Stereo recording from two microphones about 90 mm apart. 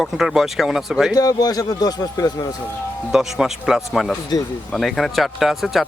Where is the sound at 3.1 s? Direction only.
5° right (ahead or behind).